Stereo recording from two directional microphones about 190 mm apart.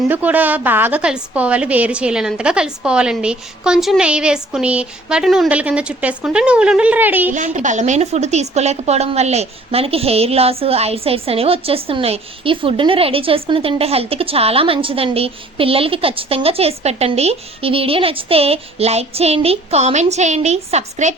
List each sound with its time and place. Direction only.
0.1 s a woman's voice: 10° right (ahead or behind)
7.3 s a woman's voice: 40° right (ahead or behind)